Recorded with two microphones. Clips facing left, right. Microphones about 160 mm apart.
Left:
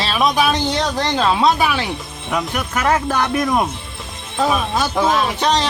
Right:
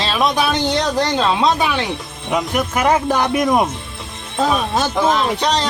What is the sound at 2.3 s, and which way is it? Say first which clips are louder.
Speech: right 3 dB; 15° right (ahead or behind).